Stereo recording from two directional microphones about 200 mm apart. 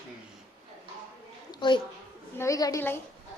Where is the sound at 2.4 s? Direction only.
15° left (ahead or behind).